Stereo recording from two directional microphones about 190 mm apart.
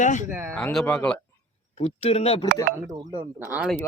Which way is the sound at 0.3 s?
10° right (ahead or behind).